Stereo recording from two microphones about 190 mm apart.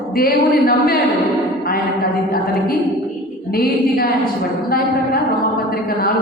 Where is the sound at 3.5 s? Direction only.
50° left (ahead or behind).